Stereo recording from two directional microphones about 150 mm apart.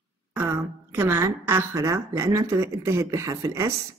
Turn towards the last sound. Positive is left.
turn(degrees=-20)  # may be behind; listen again after turning